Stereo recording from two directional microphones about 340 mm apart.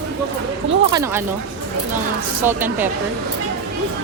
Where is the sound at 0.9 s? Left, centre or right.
Centre.